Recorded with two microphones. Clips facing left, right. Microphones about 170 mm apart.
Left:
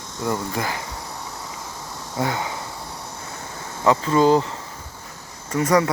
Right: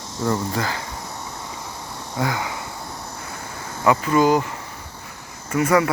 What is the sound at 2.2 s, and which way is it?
Speech, 25° left (ahead or behind).